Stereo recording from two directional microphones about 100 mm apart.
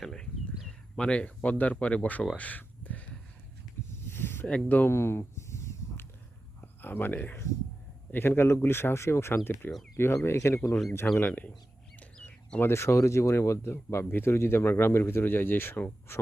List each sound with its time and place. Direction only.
0.0 s a sound: centre (ahead or behind); by 6.1 s 30° left (ahead or behind)
6.6 s speech: 20° left (ahead or behind)
11.0 s speech: 15° left (ahead or behind)
11.9 s bird: 10° left (ahead or behind)
12.5 s speech: 25° left (ahead or behind)